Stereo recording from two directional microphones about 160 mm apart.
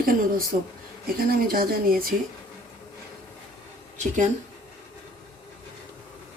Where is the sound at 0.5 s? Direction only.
50° right (ahead or behind).